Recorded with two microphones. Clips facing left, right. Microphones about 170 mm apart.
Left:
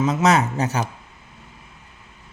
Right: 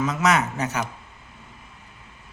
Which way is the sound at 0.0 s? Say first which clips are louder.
Left 4 dB; 30° left (ahead or behind).